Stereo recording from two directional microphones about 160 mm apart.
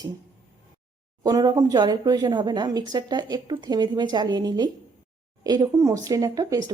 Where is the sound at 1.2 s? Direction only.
25° right (ahead or behind).